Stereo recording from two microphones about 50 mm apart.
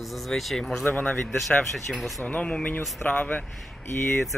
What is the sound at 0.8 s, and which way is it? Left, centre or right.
Speech, left.